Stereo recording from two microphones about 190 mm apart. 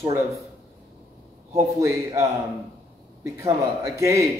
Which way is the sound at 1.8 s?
15° right (ahead or behind).